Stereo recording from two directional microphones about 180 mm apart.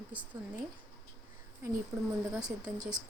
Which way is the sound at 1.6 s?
15° right (ahead or behind).